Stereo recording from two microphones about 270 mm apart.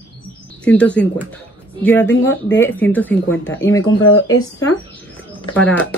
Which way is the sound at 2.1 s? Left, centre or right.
Left.